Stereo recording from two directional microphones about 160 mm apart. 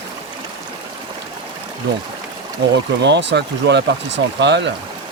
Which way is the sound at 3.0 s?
90° right.